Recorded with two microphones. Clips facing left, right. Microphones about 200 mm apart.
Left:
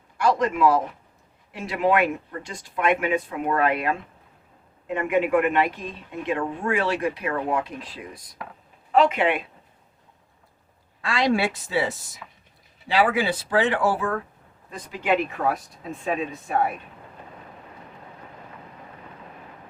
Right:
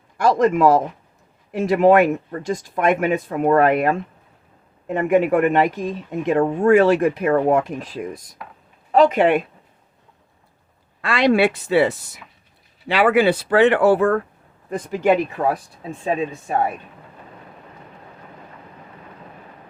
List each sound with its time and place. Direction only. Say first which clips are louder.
0.2 s speech: right 5 dB; 45° right (ahead or behind)
11.0 s speech: right 6 dB; 65° right (ahead or behind)
14.7 s speech: right 11 dB; 50° right (ahead or behind)